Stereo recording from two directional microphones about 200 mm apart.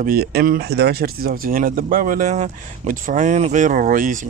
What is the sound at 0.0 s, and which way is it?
Speech, 50° right (ahead or behind).